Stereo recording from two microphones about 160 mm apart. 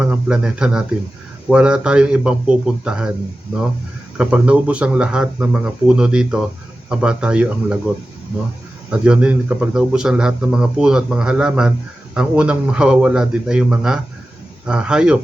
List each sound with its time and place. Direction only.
0.0 s speech: 5° right (ahead or behind)
4.2 s speech: 10° right (ahead or behind)
8.9 s speech: 5° right (ahead or behind)